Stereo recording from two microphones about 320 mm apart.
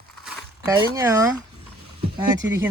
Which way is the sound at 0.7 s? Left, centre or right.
Centre.